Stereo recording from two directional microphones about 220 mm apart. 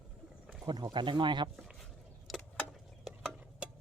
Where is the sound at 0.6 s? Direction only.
20° right (ahead or behind).